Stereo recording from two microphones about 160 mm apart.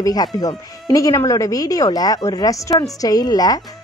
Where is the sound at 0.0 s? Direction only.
25° left (ahead or behind).